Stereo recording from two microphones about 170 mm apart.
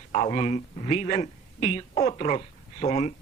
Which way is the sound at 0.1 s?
40° left (ahead or behind).